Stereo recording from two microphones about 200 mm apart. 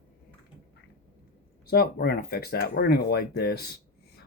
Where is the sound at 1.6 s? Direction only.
50° left (ahead or behind).